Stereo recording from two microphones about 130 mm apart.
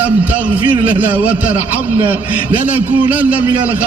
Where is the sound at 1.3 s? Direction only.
10° right (ahead or behind).